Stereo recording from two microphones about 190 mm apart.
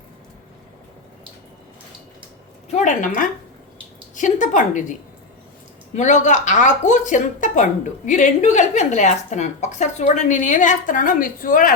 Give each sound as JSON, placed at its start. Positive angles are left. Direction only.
{"t": 2.7, "sound": "speech", "side_deg": 40}
{"t": 4.1, "sound": "a woman's voice", "side_deg": 40}
{"t": 6.0, "sound": "speech", "side_deg": 40}